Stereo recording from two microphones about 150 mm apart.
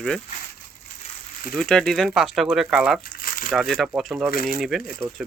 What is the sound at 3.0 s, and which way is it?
Crumpling, 75° left (ahead or behind).